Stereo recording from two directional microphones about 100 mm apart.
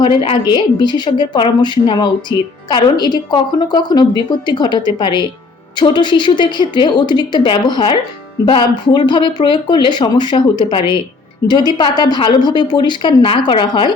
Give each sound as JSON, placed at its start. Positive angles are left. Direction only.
{"t": 0.0, "sound": "a woman's voice", "side_deg": 55}